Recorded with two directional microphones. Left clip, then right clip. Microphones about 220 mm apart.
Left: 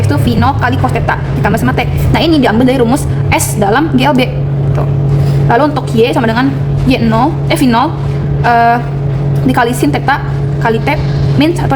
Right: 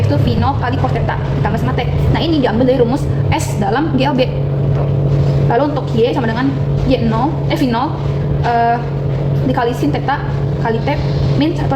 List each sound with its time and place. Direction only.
0.1 s a woman's voice: 40° left (ahead or behind)
5.5 s a woman's voice: 40° left (ahead or behind)